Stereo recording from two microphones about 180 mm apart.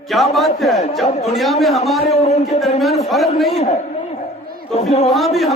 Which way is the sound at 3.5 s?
35° left (ahead or behind).